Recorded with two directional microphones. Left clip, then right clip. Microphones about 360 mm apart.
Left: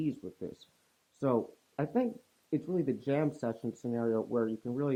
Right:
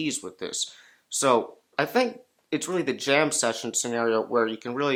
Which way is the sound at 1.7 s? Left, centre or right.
Centre.